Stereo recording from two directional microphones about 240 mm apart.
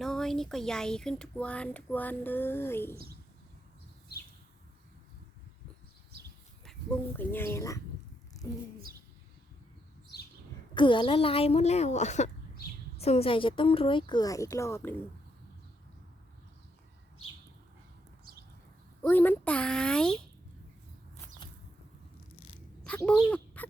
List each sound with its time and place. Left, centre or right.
0.0 s speech: centre
6.7 s speech: centre
8.4 s bird: centre
10.8 s speech: left
19.0 s speech: centre
22.9 s bird: centre